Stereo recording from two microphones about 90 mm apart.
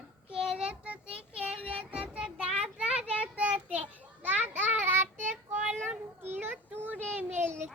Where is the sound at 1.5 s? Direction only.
90° right.